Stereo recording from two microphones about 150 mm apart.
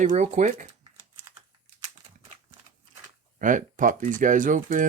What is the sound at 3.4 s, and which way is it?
Speech, 60° right (ahead or behind).